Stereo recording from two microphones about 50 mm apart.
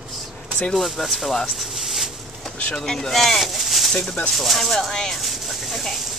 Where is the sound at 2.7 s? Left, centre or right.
Centre.